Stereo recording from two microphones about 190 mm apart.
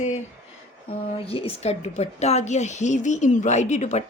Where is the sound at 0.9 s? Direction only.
30° left (ahead or behind).